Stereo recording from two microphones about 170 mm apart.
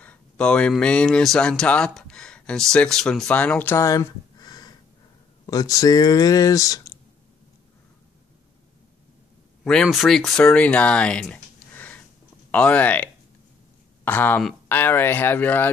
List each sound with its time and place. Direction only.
0.0 s speech: 5° left (ahead or behind)
9.7 s speech: centre (ahead or behind)